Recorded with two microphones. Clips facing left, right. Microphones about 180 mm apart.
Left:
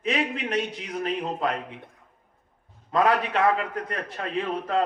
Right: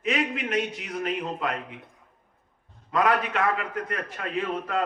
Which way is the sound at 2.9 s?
35° left (ahead or behind).